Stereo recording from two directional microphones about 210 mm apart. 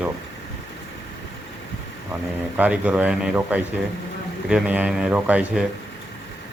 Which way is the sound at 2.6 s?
5° right (ahead or behind).